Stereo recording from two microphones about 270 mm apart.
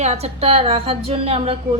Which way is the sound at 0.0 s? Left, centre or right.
Right.